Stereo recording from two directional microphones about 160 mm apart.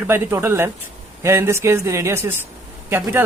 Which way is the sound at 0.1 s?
15° right (ahead or behind).